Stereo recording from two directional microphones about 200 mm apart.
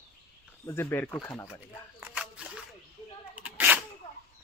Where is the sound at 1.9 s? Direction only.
5° right (ahead or behind).